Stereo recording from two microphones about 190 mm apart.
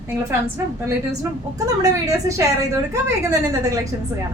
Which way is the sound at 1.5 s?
20° right (ahead or behind).